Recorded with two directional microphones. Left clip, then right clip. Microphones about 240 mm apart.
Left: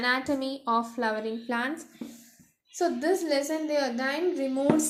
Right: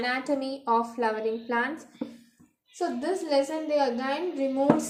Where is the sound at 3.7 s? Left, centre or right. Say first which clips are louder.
Right 3 dB; left.